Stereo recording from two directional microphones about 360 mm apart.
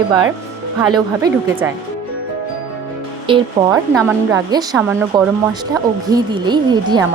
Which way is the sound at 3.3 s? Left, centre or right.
Centre.